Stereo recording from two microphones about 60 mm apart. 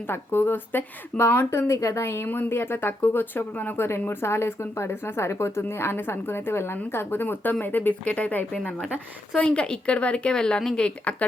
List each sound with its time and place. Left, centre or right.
0.1 s speech: left
1.5 s speech: left
3.8 s a woman's voice: left
8.5 s speech: centre